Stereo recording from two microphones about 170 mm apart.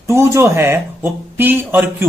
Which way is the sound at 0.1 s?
15° right (ahead or behind).